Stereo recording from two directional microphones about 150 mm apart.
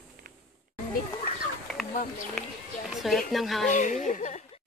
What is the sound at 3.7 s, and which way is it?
Speech, 55° left (ahead or behind).